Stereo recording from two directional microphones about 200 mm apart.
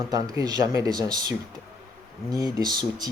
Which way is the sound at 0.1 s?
20° right (ahead or behind).